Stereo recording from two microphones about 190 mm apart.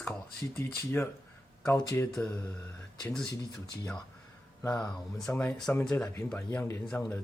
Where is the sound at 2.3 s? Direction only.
15° left (ahead or behind).